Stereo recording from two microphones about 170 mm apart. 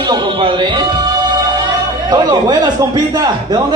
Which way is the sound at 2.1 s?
25° right (ahead or behind).